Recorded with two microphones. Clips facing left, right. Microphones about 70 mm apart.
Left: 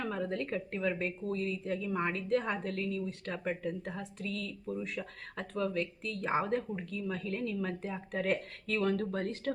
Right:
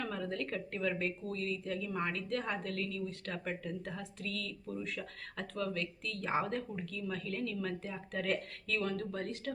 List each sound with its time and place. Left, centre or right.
0.0 s speech: left